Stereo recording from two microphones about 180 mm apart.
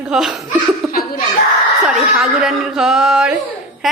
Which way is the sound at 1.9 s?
5° right (ahead or behind).